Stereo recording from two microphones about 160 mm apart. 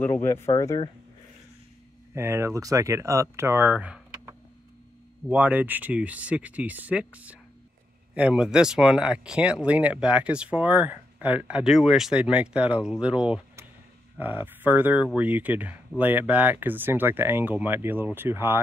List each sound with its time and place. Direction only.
0.0 s speech: 15° left (ahead or behind)
0.5 s speech: 25° left (ahead or behind)
2.1 s speech: 15° right (ahead or behind)
5.3 s speech: 10° right (ahead or behind)